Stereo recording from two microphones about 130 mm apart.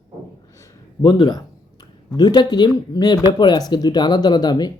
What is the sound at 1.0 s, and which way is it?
Speech, 30° left (ahead or behind).